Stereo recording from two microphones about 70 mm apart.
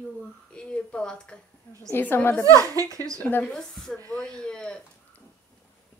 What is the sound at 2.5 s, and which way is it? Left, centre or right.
Speech, right.